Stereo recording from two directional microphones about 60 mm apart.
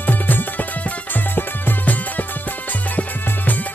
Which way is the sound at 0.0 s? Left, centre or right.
Left.